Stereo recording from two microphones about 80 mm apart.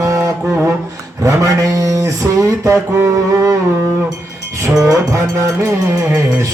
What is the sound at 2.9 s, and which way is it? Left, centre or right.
Music, right.